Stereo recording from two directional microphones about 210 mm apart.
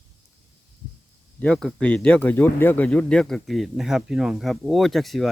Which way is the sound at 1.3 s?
5° left (ahead or behind).